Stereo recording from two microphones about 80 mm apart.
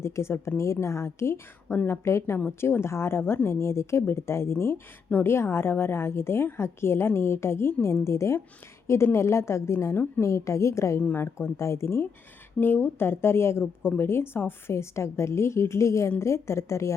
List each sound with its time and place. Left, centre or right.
0.0 s a woman's voice: left
1.6 s a woman's voice: left
11.0 s a woman's voice: left